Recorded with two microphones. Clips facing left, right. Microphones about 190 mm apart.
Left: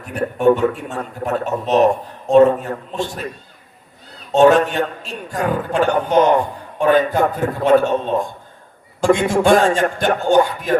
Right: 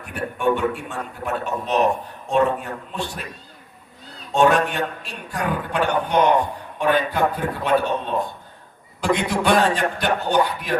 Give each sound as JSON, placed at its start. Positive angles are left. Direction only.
{"t": 0.0, "sound": "speech", "side_deg": 40}
{"t": 4.3, "sound": "a man's voice", "side_deg": 40}